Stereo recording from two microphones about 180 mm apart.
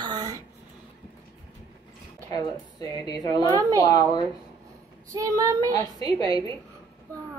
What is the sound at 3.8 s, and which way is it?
Speech, 20° left (ahead or behind).